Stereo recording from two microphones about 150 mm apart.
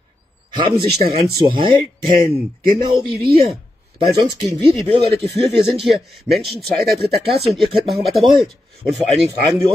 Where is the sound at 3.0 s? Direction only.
35° right (ahead or behind).